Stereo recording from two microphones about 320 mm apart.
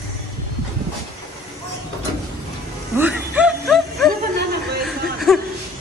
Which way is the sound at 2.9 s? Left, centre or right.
Centre.